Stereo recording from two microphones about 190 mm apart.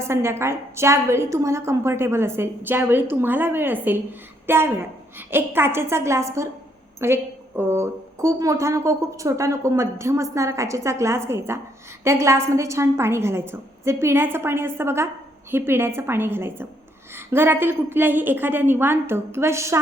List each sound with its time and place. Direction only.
0.0 s a woman's voice: 15° right (ahead or behind)